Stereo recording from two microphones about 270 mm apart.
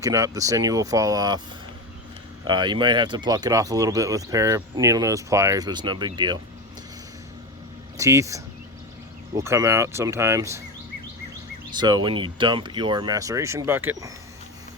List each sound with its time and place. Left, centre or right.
0.0 s speech: centre
2.5 s speech: centre
7.9 s speech: centre
11.8 s speech: centre